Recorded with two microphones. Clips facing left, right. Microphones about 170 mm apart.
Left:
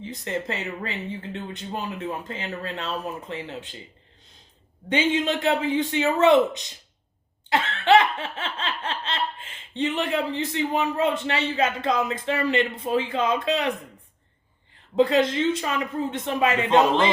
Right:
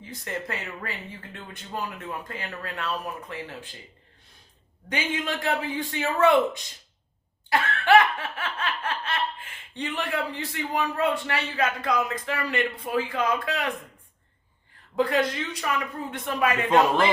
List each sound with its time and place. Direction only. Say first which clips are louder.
0.0 s speech: left 4 dB; 20° left (ahead or behind)
4.9 s speech: left 6 dB; 25° left (ahead or behind)
7.5 s laughter: left 1 dB; 20° left (ahead or behind)
14.9 s speech: left 4 dB; 25° left (ahead or behind)
16.6 s a man's voice: left 1 dB; 10° right (ahead or behind)